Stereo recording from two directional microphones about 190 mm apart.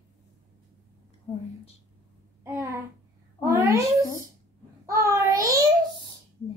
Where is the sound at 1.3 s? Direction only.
35° left (ahead or behind).